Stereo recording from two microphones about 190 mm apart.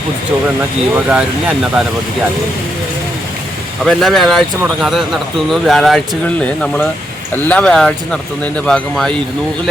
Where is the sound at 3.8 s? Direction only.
Centre (ahead or behind).